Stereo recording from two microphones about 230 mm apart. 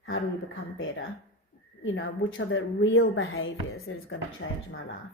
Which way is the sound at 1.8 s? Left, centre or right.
Left.